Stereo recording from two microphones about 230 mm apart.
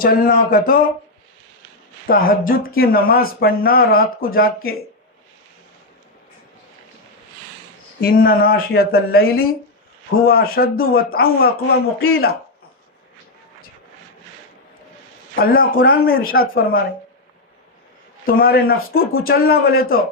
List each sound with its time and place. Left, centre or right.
0.0 s speech: left
2.0 s speech: left
8.0 s speech: left
15.4 s speech: left
18.3 s speech: left